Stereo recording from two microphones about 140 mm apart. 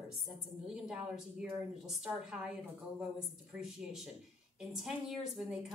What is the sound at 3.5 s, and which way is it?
A woman's voice, 5° right (ahead or behind).